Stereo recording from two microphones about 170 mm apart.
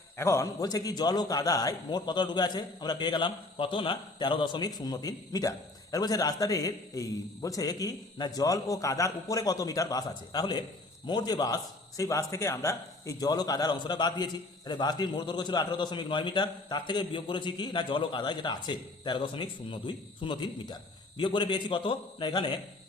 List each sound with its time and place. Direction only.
0.2 s a man's voice: 15° left (ahead or behind)